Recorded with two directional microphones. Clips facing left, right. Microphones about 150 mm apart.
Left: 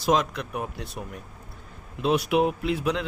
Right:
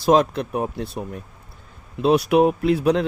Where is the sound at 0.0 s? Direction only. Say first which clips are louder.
Right 7 dB; 35° right (ahead or behind).